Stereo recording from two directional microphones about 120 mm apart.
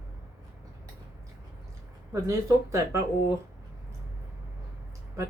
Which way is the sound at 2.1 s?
25° right (ahead or behind).